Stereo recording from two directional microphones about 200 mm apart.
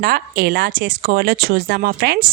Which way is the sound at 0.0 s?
50° right (ahead or behind).